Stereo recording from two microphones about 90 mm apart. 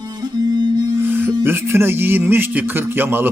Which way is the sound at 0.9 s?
25° right (ahead or behind).